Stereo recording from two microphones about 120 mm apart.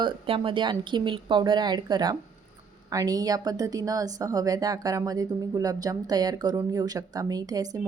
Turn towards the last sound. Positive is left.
turn(degrees=-30)  # may be behind; listen again after turning